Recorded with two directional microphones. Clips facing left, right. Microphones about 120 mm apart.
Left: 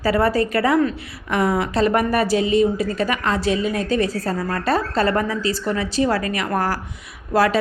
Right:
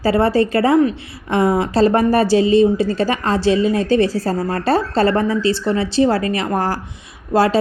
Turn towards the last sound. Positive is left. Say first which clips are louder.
# right 3 dB
turn(degrees=-30)  # may be behind; listen again after turning